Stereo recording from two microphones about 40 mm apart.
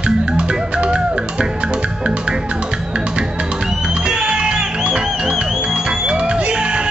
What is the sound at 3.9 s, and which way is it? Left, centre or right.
Music, right.